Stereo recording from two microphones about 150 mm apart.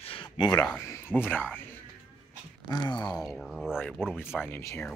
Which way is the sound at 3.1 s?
Centre (ahead or behind).